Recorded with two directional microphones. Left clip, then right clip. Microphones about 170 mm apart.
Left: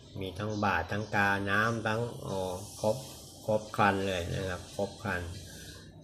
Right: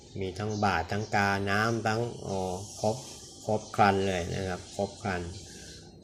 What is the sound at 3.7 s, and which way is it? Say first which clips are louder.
Speech: right 5 dB; 35° right (ahead or behind).